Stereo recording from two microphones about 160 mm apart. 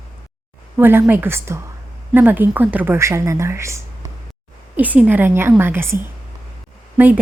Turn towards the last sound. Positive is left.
turn(degrees=-10)  # may be behind; listen again after turning